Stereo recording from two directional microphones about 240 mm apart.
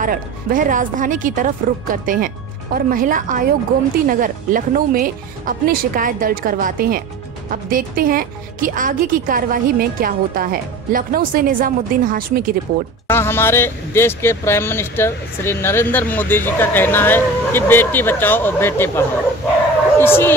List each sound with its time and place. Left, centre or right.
0.0 s speech: right
13.0 s speech: centre